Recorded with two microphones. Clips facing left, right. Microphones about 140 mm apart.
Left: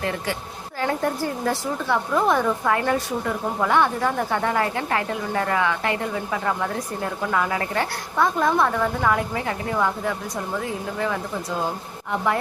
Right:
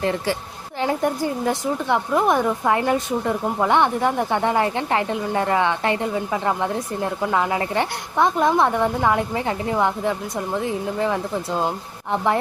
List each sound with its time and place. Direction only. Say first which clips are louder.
0.8 s a woman's voice: right 2 dB; 15° right (ahead or behind)